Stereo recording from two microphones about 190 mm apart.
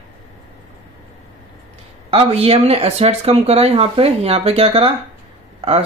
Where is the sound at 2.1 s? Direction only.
30° right (ahead or behind).